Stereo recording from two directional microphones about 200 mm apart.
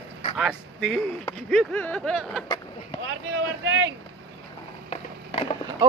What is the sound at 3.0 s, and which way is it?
Speech, 65° right (ahead or behind).